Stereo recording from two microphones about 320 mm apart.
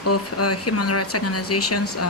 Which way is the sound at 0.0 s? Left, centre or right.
Left.